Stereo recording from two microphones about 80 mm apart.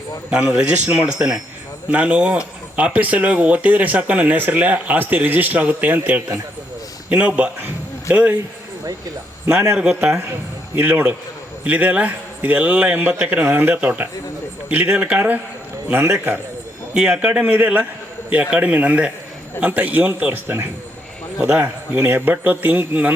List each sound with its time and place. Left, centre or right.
0.3 s a man's voice: centre
7.6 s dog: right
9.7 s a man's voice: centre
10.0 s a man's voice: right
10.8 s a man's voice: right
13.5 s speech: right
16.9 s a man's voice: centre; by 20.7 s right
21.3 s a man's voice: centre
21.9 s speech: right